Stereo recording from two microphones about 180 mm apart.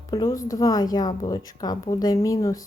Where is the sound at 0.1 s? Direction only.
20° left (ahead or behind).